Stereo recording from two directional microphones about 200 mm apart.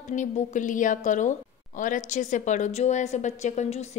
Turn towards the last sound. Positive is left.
turn(degrees=35)  # may be behind; listen again after turning